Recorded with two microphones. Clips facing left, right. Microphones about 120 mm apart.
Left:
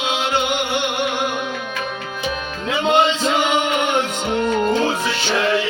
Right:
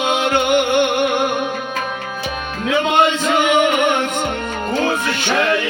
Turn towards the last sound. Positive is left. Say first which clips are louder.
# right 4 dB
turn(degrees=-55)  # may be behind; listen again after turning